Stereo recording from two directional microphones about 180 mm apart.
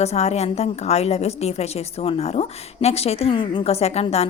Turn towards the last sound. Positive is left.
turn(degrees=35)  # may be behind; listen again after turning